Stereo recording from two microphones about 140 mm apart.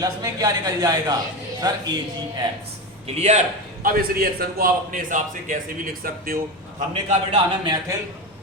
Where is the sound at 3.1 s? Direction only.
50° right (ahead or behind).